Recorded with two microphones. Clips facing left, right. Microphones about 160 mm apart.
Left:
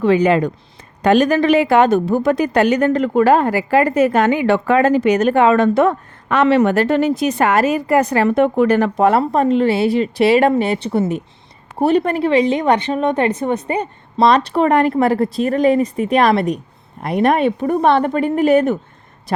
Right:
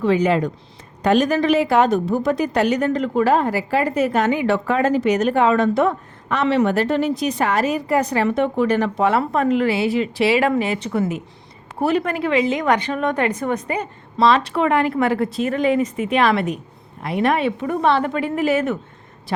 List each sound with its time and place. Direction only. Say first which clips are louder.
0.0 s a woman's voice: left 4 dB; 65° left (ahead or behind)
9.0 s speech: left 4 dB; 35° left (ahead or behind)
14.2 s speech: left 3 dB; 40° left (ahead or behind)